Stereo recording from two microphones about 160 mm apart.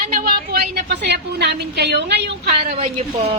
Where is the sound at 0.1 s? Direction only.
70° right (ahead or behind); by 2.7 s 90° right.